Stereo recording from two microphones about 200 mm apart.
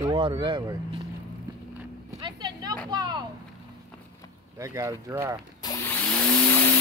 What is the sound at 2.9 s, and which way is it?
Speech, 20° right (ahead or behind).